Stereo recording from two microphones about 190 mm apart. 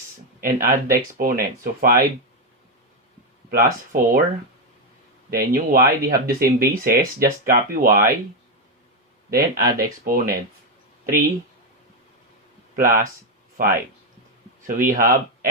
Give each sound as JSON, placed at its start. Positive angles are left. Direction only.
{"t": 0.4, "sound": "speech", "side_deg": -50}
{"t": 3.5, "sound": "speech", "side_deg": -45}
{"t": 5.3, "sound": "speech", "side_deg": -50}
{"t": 9.7, "sound": "speech", "side_deg": -50}
{"t": 12.7, "sound": "speech", "side_deg": -45}